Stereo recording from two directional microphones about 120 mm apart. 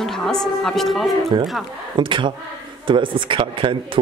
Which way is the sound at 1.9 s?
40° right (ahead or behind).